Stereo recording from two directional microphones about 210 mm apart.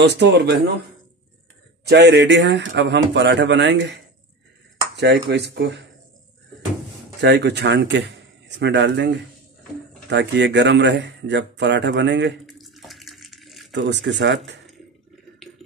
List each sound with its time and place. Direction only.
0.0 s speech: 55° right (ahead or behind)
1.9 s speech: 50° right (ahead or behind)
7.2 s speech: 50° right (ahead or behind)
12.4 s bathtub: centre (ahead or behind)
13.7 s speech: 55° right (ahead or behind)